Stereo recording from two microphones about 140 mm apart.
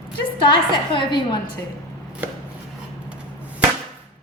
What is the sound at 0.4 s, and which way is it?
Speech, 35° left (ahead or behind).